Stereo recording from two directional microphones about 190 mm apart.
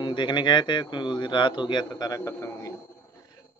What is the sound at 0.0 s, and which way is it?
A man's voice, 25° left (ahead or behind).